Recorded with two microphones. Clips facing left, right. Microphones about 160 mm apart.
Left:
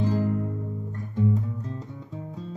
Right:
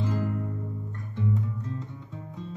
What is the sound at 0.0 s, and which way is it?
Music, 35° left (ahead or behind).